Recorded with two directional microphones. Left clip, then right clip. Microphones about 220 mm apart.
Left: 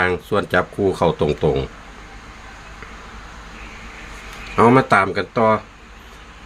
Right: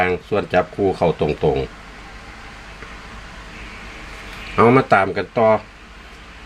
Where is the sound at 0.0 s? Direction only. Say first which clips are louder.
Even; 15° left (ahead or behind).